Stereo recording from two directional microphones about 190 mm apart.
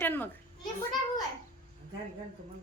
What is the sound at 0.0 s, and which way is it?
Speech, 10° left (ahead or behind).